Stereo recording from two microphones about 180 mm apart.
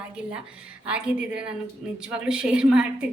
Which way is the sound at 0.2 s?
5° right (ahead or behind).